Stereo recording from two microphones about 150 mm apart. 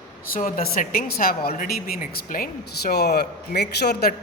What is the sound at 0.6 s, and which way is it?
A woman's voice, 70° left (ahead or behind).